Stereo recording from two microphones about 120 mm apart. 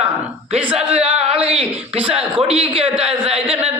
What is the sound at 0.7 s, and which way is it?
Speech, 60° right (ahead or behind).